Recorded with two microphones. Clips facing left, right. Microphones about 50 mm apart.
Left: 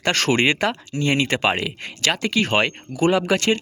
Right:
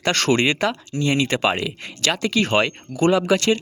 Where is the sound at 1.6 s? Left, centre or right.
Left.